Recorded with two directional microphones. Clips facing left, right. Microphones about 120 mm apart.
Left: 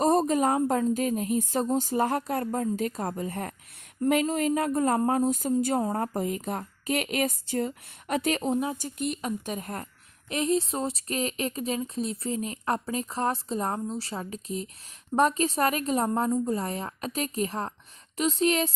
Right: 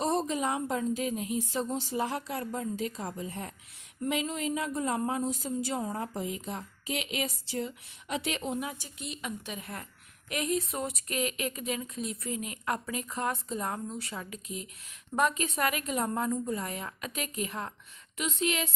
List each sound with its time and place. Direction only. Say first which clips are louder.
0.0 s speech: left 7 dB; 45° left (ahead or behind)
8.8 s speech: left 9 dB; 50° left (ahead or behind)
10.2 s speech: left 5 dB; 30° left (ahead or behind)